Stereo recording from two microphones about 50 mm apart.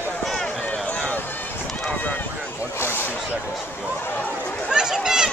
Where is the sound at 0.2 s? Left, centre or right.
Centre.